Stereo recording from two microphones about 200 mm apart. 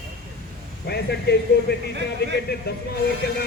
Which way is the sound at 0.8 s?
55° left (ahead or behind).